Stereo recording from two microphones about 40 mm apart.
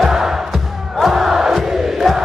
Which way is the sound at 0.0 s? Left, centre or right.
Centre.